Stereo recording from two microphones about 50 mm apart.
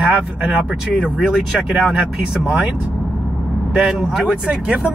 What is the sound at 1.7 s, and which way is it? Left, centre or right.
Speech, centre.